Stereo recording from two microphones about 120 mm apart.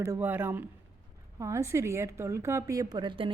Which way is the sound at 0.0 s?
20° right (ahead or behind).